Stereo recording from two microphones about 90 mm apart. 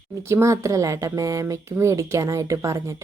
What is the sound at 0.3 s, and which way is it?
Speech, 35° right (ahead or behind).